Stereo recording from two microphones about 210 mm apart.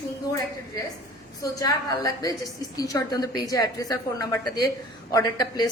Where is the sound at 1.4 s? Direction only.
15° left (ahead or behind).